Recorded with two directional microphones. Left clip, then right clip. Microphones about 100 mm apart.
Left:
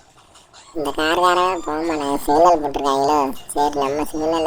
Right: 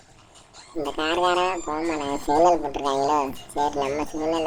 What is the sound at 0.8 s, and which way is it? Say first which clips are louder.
Speech: left 6 dB; 40° left (ahead or behind).